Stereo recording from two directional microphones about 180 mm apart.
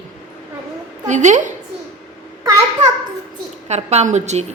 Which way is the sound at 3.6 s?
40° right (ahead or behind).